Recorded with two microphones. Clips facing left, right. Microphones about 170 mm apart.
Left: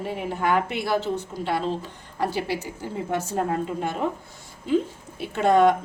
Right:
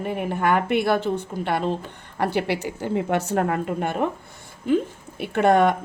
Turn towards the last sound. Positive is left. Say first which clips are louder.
# right 1 dB
turn(degrees=-60)  # may be behind; listen again after turning